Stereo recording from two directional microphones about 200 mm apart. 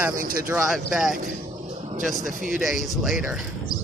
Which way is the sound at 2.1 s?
40° right (ahead or behind).